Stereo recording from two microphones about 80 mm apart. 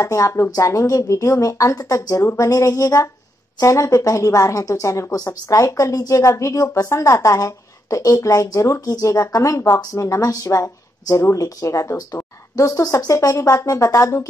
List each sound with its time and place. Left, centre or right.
0.0 s speech: left